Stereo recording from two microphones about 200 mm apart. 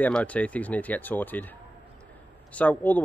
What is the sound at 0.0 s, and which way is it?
Speech, 5° left (ahead or behind).